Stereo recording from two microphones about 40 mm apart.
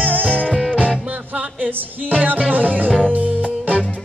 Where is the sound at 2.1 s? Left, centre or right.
Right.